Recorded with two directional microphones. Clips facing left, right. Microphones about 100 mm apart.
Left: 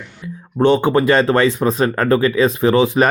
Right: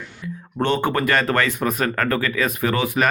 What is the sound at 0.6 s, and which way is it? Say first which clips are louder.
Speech: left 7 dB; 15° left (ahead or behind).